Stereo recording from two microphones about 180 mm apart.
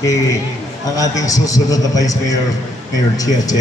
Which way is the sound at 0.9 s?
20° left (ahead or behind).